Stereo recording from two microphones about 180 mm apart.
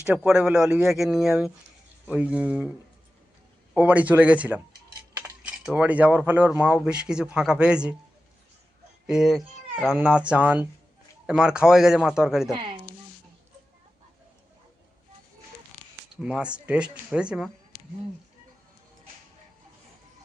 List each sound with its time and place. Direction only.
0.3 s speech: 5° right (ahead or behind)
3.8 s speech: 10° right (ahead or behind)
9.0 s speech: 5° right (ahead or behind)
12.5 s speech: 25° right (ahead or behind)
16.2 s speech: 5° right (ahead or behind)